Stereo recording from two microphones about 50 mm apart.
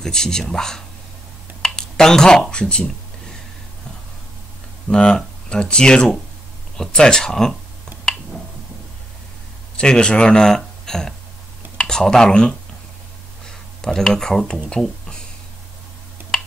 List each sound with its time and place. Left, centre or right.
0.0 s speech: centre
1.6 s a sound: centre
4.8 s speech: centre
9.8 s speech: centre
16.2 s tick-tock: right